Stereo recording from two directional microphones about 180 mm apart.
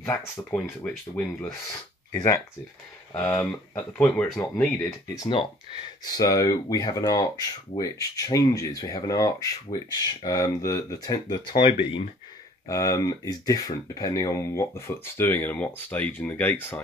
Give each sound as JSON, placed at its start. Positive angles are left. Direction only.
{"t": 0.0, "sound": "speech", "side_deg": 10}
{"t": 3.2, "sound": "speech", "side_deg": 10}